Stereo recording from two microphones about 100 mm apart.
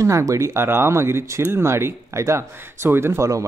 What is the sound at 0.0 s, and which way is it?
Speech, 30° right (ahead or behind).